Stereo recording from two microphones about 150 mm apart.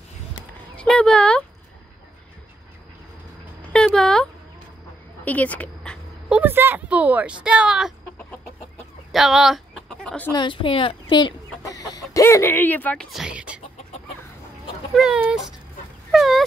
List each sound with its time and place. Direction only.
0.7 s speech: 5° left (ahead or behind)
3.7 s a sound: 5° left (ahead or behind)
5.2 s speech: 10° left (ahead or behind)
6.2 s a woman's voice: 10° right (ahead or behind)
9.1 s speech: centre (ahead or behind)
10.3 s speech: 30° left (ahead or behind); by 13.6 s 5° right (ahead or behind)
15.0 s speech: 5° right (ahead or behind)
16.1 s dog: centre (ahead or behind)